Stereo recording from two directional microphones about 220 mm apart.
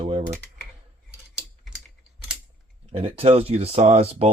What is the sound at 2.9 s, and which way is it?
Speech, 25° right (ahead or behind).